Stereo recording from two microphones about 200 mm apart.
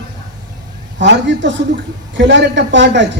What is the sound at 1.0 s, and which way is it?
A man's voice, 60° right (ahead or behind).